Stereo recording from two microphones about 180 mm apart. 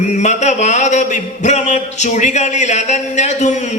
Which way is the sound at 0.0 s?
40° left (ahead or behind).